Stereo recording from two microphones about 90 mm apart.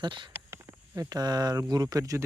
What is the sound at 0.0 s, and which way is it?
Speech, 60° right (ahead or behind).